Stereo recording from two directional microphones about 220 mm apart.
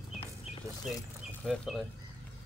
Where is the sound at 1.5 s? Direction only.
Centre (ahead or behind).